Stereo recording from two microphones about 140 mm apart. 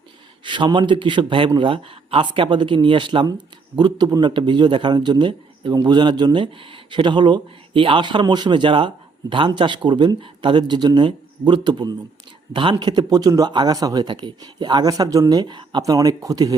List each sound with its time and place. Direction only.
0.4 s speech: 35° right (ahead or behind)